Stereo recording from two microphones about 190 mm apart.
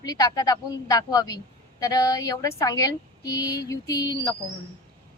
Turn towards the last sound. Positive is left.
turn(degrees=20)  # may be behind; listen again after turning